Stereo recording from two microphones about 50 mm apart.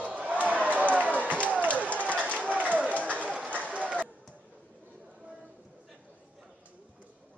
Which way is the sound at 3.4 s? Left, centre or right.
Right.